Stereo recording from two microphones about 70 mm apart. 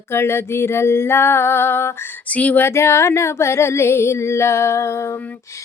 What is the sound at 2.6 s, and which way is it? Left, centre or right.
Music, left.